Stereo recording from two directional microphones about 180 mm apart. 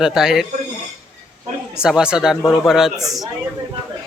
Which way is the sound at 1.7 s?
5° right (ahead or behind).